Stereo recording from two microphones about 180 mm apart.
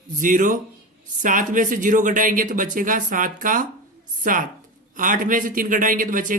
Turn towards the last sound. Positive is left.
turn(degrees=-50)  # may be behind; listen again after turning